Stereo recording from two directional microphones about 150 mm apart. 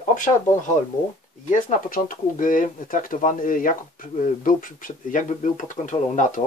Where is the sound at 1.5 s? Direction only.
60° left (ahead or behind).